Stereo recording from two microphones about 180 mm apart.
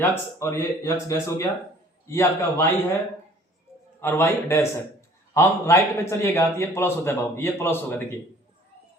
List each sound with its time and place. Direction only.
0.0 s a man's voice: 15° left (ahead or behind)
4.0 s a man's voice: 15° left (ahead or behind)